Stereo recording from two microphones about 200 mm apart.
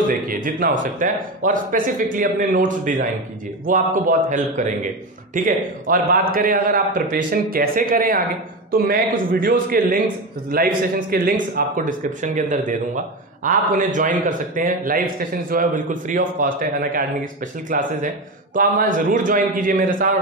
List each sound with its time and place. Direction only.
0.3 s a man's voice: 45° right (ahead or behind)